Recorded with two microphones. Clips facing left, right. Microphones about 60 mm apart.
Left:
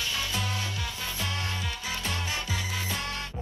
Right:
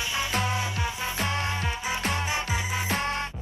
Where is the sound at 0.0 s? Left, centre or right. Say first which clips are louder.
Right 4 dB; centre.